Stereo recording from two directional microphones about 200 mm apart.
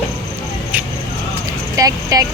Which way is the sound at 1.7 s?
15° right (ahead or behind).